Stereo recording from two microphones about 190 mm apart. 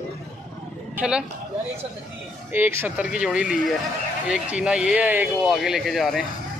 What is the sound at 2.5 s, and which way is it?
Speech, 10° right (ahead or behind).